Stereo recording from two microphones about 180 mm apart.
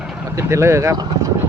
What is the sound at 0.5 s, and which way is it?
Speech, 15° right (ahead or behind).